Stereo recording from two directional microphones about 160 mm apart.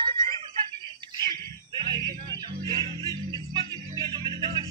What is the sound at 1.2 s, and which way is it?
Music, 25° right (ahead or behind).